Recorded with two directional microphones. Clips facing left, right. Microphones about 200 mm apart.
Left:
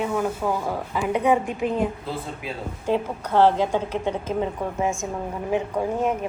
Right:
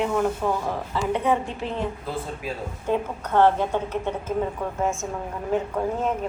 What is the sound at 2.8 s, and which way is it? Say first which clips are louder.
A woman's voice: left 1 dB; 10° left (ahead or behind).